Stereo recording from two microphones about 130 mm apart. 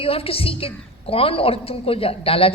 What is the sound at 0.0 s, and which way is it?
A woman's voice, 45° left (ahead or behind).